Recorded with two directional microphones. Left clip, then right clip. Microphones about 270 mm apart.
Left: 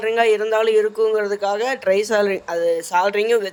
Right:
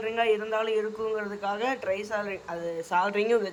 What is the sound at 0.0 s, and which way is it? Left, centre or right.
Speech, left.